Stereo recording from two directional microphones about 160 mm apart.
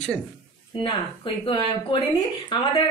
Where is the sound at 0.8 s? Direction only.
30° left (ahead or behind).